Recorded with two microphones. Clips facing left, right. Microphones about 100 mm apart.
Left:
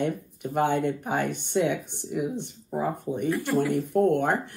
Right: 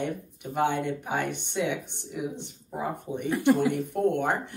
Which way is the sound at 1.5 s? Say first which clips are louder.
Left 6 dB; 50° left (ahead or behind).